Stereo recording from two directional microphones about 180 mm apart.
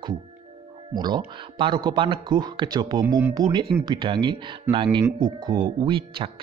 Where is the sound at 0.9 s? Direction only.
25° right (ahead or behind).